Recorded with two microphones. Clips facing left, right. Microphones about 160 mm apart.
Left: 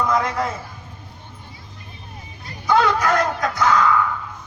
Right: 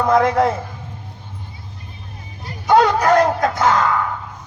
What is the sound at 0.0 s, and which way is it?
Speech, 55° right (ahead or behind).